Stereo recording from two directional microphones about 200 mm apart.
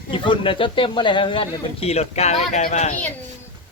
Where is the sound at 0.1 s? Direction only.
25° left (ahead or behind).